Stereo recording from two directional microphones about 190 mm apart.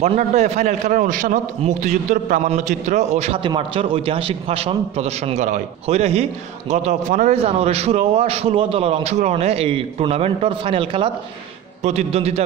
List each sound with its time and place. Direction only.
0.0 s a man's voice: 35° right (ahead or behind)